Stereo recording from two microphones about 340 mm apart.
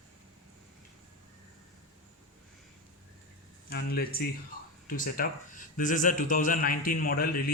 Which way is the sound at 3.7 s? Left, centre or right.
Left.